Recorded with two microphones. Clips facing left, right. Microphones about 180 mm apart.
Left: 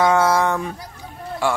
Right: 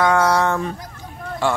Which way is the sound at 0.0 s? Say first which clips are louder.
Even; 20° left (ahead or behind).